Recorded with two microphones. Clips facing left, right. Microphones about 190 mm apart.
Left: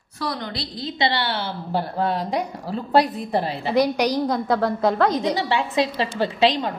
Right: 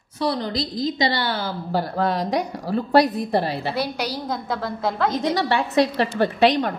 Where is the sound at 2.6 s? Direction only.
75° right (ahead or behind).